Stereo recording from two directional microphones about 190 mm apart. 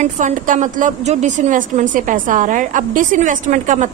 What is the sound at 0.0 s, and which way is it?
A woman's voice, 40° right (ahead or behind).